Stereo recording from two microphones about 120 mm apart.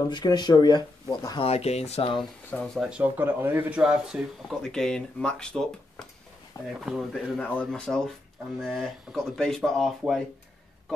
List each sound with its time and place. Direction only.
0.0 s speech: 35° left (ahead or behind)
1.4 s speech: 60° left (ahead or behind)
2.5 s speech: 5° left (ahead or behind)
2.8 s speech: 10° right (ahead or behind)
3.8 s speech: 5° right (ahead or behind)
4.6 s speech: 5° left (ahead or behind)